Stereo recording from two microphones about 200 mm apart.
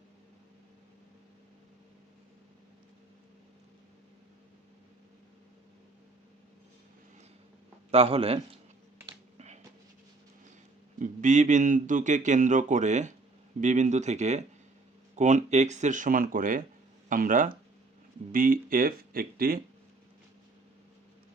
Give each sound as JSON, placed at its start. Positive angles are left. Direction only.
{"t": 7.9, "sound": "a man's voice", "side_deg": -30}
{"t": 11.0, "sound": "speech", "side_deg": -40}